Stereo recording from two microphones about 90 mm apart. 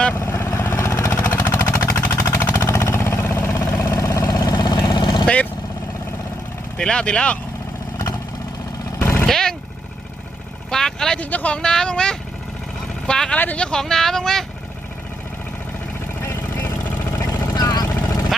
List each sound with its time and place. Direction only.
0.1 s vehicle: 25° left (ahead or behind); by 5.2 s 60° left (ahead or behind)
5.2 s vehicle: 15° left (ahead or behind)
6.7 s speech: 10° left (ahead or behind)
9.0 s vehicle: 25° left (ahead or behind)
9.2 s vehicle: 5° left (ahead or behind)
10.7 s vehicle: 5° left (ahead or behind)
11.2 s speech: 15° left (ahead or behind)
16.2 s vehicle: 25° left (ahead or behind); by 17.8 s 45° left (ahead or behind)